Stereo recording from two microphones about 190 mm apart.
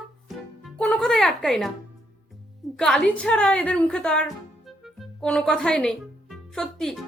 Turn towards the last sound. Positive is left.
turn(degrees=0)  # may be behind; listen again after turning